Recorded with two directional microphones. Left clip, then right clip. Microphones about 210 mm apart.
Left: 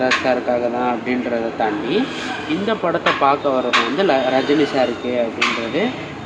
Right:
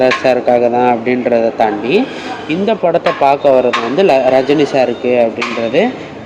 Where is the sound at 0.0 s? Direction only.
35° right (ahead or behind).